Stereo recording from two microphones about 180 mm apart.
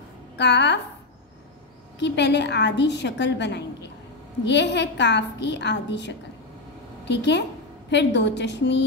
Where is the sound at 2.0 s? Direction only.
75° left (ahead or behind).